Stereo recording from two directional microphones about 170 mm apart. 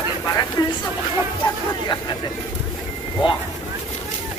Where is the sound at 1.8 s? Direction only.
25° left (ahead or behind).